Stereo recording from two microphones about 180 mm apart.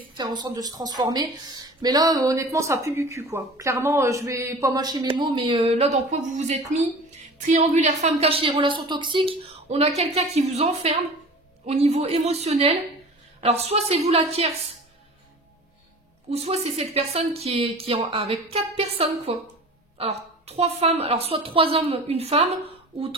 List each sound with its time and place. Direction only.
0.1 s a woman's voice: 25° right (ahead or behind)
16.3 s a woman's voice: 35° right (ahead or behind)